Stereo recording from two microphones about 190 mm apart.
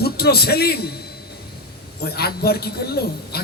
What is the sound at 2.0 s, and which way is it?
A man's voice, 55° left (ahead or behind).